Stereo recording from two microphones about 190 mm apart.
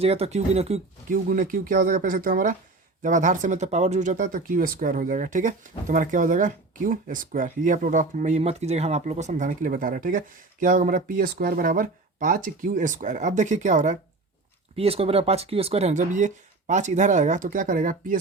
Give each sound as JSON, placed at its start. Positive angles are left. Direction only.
{"t": 0.0, "sound": "speech", "side_deg": -30}